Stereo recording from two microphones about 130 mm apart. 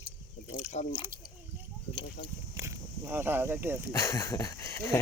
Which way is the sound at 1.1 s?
90° right.